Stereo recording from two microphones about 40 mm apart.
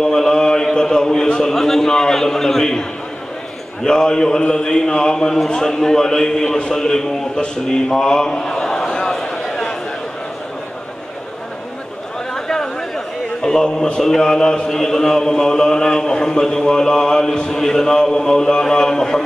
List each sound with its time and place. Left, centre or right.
0.0 s a sound: centre
0.7 s a man's voice: centre
3.8 s a man's voice: centre
12.4 s a man's voice: centre